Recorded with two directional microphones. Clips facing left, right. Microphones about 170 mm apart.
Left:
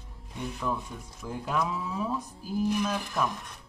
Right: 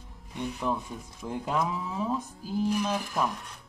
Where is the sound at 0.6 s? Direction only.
20° right (ahead or behind).